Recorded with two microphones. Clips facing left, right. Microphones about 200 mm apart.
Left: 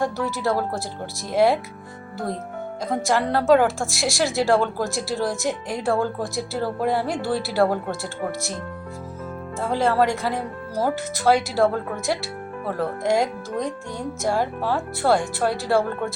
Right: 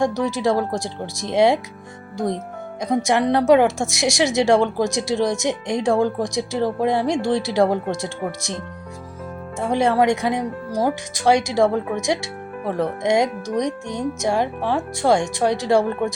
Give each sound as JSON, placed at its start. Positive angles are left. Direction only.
{"t": 0.0, "sound": "speech", "side_deg": -15}
{"t": 9.6, "sound": "speech", "side_deg": -15}